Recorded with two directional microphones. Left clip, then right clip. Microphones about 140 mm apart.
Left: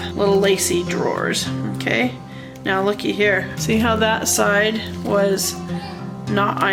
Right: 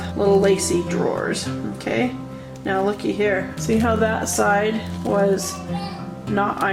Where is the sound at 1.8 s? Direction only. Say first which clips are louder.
Left 3 dB; 40° left (ahead or behind).